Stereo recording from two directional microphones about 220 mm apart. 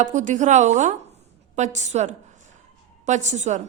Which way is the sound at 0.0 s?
35° right (ahead or behind).